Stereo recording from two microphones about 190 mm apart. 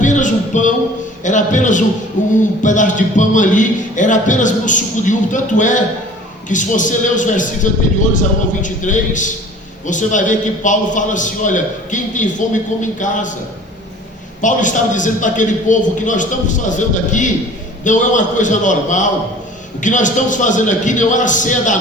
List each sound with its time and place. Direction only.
0.0 s a sound: 40° left (ahead or behind)
1.2 s a man's voice: 40° left (ahead or behind)
14.4 s a man's voice: 40° left (ahead or behind)